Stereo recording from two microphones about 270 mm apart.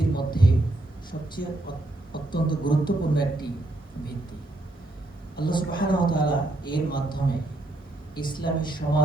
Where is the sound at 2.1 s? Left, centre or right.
Centre.